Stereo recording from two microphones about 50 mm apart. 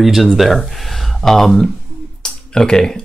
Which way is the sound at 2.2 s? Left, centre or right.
Centre.